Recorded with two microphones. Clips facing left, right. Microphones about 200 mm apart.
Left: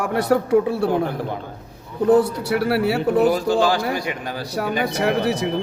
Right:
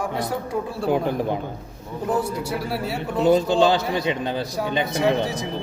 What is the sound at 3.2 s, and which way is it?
Speech, 25° right (ahead or behind).